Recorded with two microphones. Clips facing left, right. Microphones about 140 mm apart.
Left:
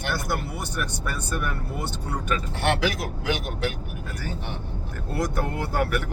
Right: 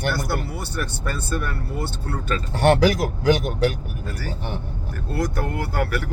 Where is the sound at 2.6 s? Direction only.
40° right (ahead or behind).